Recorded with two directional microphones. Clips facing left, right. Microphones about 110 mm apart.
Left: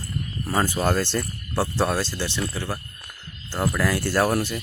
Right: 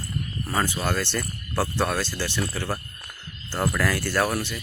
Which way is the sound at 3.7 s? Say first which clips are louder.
Left 3 dB; 20° left (ahead or behind).